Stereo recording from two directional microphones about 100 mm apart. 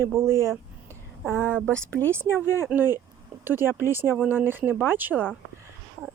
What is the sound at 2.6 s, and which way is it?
Speech, 20° right (ahead or behind).